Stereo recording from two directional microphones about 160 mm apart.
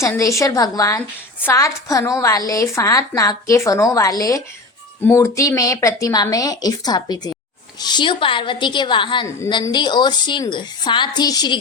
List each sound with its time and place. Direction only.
0.0 s a woman's voice: 20° left (ahead or behind)